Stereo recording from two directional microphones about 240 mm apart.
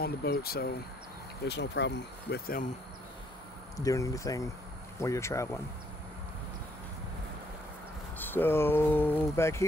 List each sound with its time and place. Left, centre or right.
0.0 s speech: left
3.7 s speech: centre
8.2 s speech: centre